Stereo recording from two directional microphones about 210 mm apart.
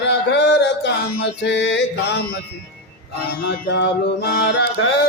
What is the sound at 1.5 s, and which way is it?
Mantra, 60° left (ahead or behind).